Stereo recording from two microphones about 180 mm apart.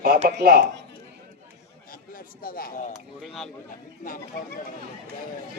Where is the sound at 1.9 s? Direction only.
50° left (ahead or behind).